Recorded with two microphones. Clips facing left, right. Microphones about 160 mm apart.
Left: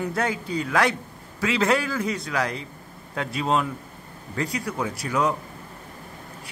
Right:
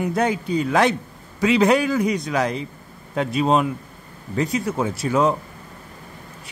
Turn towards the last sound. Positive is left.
turn(degrees=-25)  # may be behind; listen again after turning